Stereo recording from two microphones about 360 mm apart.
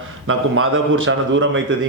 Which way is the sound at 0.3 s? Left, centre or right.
Right.